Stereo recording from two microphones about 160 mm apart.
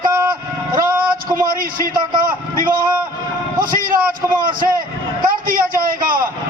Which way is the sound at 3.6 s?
60° right (ahead or behind).